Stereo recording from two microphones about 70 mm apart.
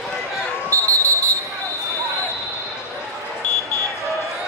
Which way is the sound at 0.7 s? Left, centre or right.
Right.